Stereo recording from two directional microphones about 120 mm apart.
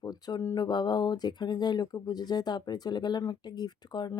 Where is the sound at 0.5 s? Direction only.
35° left (ahead or behind).